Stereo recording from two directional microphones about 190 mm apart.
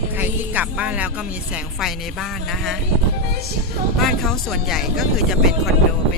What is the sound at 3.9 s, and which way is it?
Speech, centre (ahead or behind).